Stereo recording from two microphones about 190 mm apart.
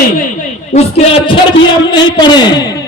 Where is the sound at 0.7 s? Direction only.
30° left (ahead or behind).